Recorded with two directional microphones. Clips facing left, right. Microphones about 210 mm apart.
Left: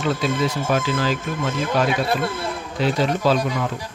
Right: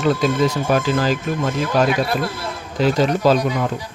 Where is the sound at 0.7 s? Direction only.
45° right (ahead or behind).